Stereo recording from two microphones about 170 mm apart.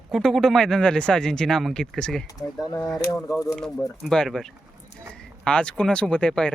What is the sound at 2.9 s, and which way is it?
Speech, 20° left (ahead or behind).